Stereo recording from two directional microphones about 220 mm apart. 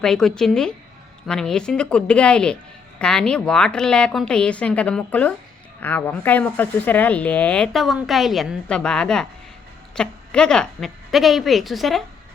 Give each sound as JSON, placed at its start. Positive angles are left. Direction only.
{"t": 0.0, "sound": "speech", "side_deg": 0}